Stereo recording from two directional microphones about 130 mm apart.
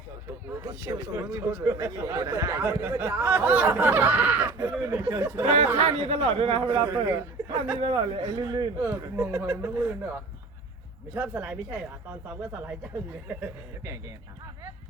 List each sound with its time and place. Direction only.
0.6 s a man's voice: 30° right (ahead or behind)
1.3 s a man's voice: 20° right (ahead or behind)
5.5 s speech: 60° right (ahead or behind)
6.9 s a man's voice: 20° right (ahead or behind)
7.8 s speech: 45° right (ahead or behind)
8.2 s a man's voice: 25° right (ahead or behind)
8.8 s speech: 15° right (ahead or behind)